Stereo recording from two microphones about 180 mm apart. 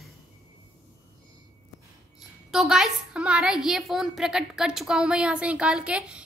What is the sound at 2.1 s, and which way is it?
A woman's voice, centre (ahead or behind).